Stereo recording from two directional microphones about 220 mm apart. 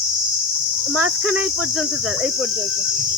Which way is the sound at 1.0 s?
90° right.